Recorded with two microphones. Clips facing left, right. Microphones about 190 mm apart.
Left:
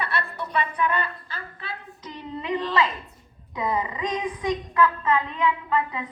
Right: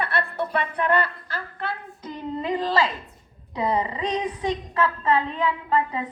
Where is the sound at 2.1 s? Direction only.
40° right (ahead or behind).